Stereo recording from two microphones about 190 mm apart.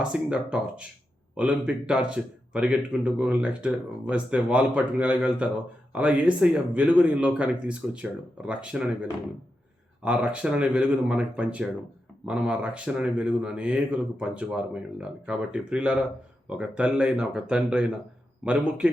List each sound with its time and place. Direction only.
0.0 s speech: 5° right (ahead or behind)